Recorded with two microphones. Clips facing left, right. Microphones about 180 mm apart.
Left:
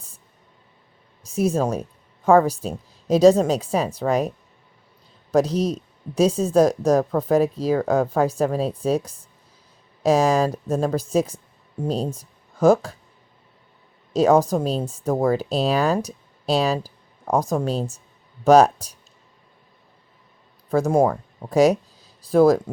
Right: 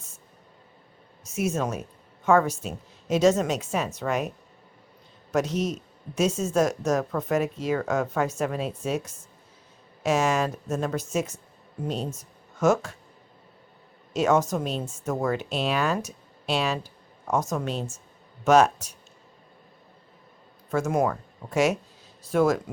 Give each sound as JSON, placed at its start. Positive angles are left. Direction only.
{"t": 1.2, "sound": "speech", "side_deg": 35}
{"t": 5.3, "sound": "speech", "side_deg": 35}
{"t": 14.1, "sound": "speech", "side_deg": 35}
{"t": 20.7, "sound": "speech", "side_deg": 35}